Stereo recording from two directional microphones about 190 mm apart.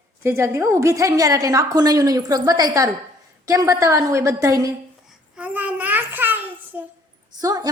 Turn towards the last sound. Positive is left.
turn(degrees=-20)  # may be behind; listen again after turning